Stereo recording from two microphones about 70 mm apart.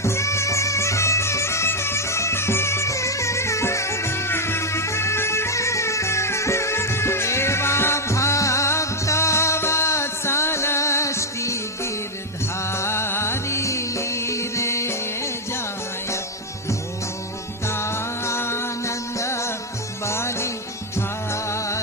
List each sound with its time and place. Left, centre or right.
0.0 s music: left
17.7 s music: left